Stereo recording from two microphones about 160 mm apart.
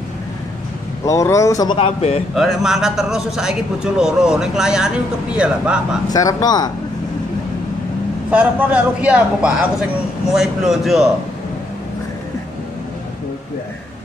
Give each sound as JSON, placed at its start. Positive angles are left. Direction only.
{"t": 1.0, "sound": "speech", "side_deg": 20}
{"t": 1.8, "sound": "speech", "side_deg": 40}
{"t": 2.3, "sound": "a man's voice", "side_deg": 0}
{"t": 6.1, "sound": "speech", "side_deg": 25}
{"t": 8.3, "sound": "a man's voice", "side_deg": -10}